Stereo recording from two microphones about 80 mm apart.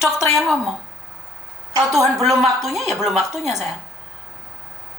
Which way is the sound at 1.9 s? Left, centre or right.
Centre.